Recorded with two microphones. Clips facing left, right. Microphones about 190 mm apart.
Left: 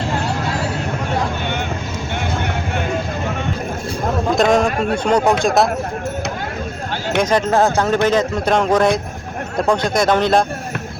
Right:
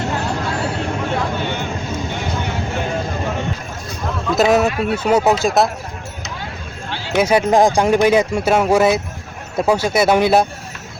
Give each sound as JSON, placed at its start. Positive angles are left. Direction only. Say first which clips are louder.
{"t": 4.4, "sound": "speech", "louder": "right 2 dB", "side_deg": -5}
{"t": 7.2, "sound": "speech", "louder": "right 2 dB", "side_deg": -10}